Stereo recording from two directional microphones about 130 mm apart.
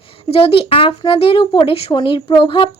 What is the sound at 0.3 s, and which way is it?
Speech, 50° left (ahead or behind).